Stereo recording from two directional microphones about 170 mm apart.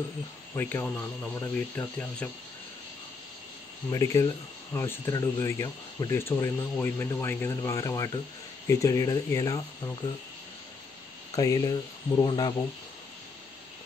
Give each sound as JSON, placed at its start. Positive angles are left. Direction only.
{"t": 0.6, "sound": "speech", "side_deg": 15}
{"t": 3.9, "sound": "speech", "side_deg": 20}
{"t": 11.3, "sound": "speech", "side_deg": 20}